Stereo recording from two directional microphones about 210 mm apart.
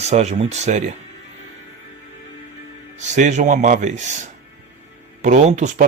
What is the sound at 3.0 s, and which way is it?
Speech, 35° right (ahead or behind).